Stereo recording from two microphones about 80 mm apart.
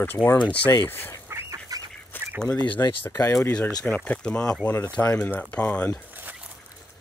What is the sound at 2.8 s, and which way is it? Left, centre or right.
Speech, left.